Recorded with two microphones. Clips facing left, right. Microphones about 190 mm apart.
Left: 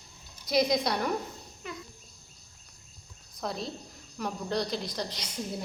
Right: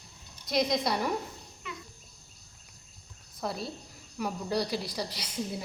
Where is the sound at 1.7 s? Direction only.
40° left (ahead or behind).